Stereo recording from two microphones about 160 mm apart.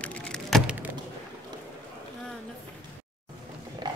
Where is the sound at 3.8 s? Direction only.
30° right (ahead or behind).